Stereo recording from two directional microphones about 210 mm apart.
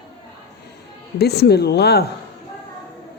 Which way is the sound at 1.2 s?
50° left (ahead or behind).